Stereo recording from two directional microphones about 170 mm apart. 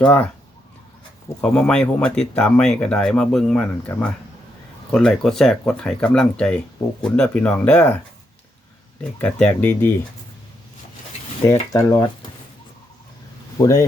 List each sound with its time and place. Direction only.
0.0 s speech: 10° left (ahead or behind)
1.4 s speech: 5° left (ahead or behind)
9.2 s speech: 10° left (ahead or behind)
11.7 s speech: 20° left (ahead or behind)